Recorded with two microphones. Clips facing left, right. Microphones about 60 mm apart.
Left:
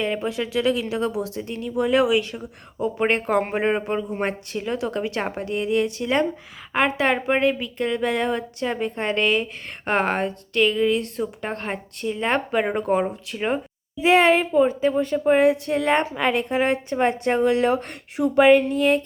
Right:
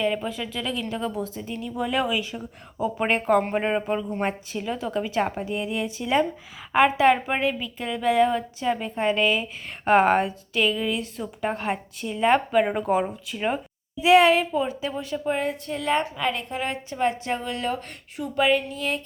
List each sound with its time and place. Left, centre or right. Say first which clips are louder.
0.0 s a woman's voice: left 1 dB; centre
14.0 s a woman's voice: even; left
15.4 s speech: left 9 dB; left
15.8 s a woman's voice: even; left